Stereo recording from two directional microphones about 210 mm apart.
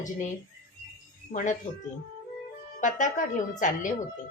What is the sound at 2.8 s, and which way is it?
A woman's voice, 35° left (ahead or behind).